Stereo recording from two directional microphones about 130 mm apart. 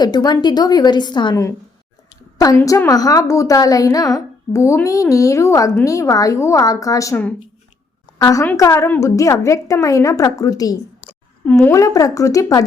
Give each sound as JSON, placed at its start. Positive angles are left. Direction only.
{"t": 0.0, "sound": "a woman's voice", "side_deg": 35}
{"t": 2.6, "sound": "a woman's voice", "side_deg": 25}
{"t": 8.2, "sound": "a woman's voice", "side_deg": 25}